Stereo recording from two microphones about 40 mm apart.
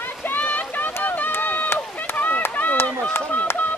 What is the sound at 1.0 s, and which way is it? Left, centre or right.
Run, left.